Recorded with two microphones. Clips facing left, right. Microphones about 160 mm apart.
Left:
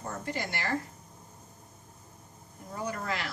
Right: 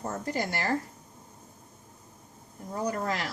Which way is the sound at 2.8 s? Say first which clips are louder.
Right 4 dB; 40° right (ahead or behind).